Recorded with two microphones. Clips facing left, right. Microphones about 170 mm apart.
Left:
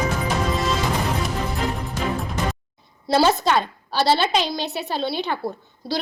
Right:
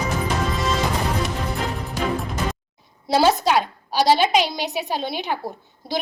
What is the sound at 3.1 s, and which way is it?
A woman's voice, 10° right (ahead or behind).